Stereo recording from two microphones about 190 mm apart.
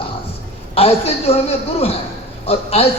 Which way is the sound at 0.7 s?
30° left (ahead or behind).